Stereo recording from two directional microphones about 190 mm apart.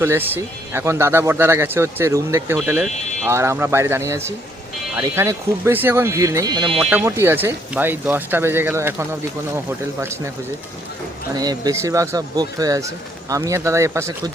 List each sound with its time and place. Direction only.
0.0 s speech: 10° right (ahead or behind)
11.3 s speech: 20° right (ahead or behind)